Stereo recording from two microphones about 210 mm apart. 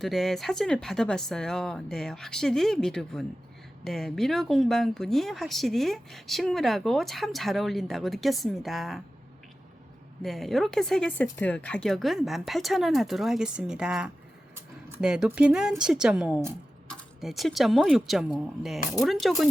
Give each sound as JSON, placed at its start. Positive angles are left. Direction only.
{"t": 0.0, "sound": "speech", "side_deg": 0}
{"t": 10.2, "sound": "speech", "side_deg": 0}